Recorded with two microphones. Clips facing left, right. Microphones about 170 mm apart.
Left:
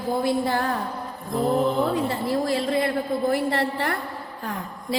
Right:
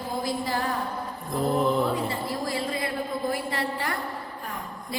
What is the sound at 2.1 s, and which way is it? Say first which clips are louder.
A woman's voice: left 6 dB; 65° left (ahead or behind).